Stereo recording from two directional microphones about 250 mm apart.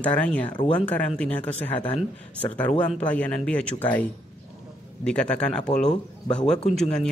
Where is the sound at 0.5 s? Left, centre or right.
Centre.